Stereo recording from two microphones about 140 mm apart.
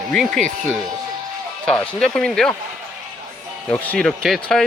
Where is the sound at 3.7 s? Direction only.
10° left (ahead or behind).